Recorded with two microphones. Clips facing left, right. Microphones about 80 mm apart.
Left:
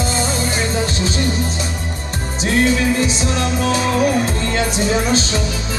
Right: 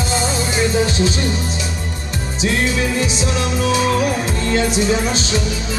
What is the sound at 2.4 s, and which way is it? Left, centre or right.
Music, left.